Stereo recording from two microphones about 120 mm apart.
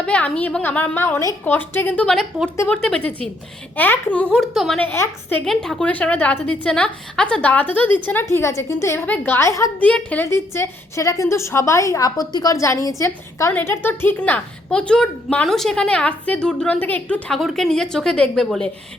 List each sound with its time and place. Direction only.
0.0 s a woman's voice: 10° left (ahead or behind)
2.0 s a woman's voice: 5° left (ahead or behind)
4.4 s speech: centre (ahead or behind)
4.8 s a woman's voice: 15° left (ahead or behind)
5.5 s a woman's voice: 5° left (ahead or behind); by 9.7 s 25° left (ahead or behind)
9.8 s a woman's voice: 10° left (ahead or behind)
13.5 s a woman's voice: 15° left (ahead or behind)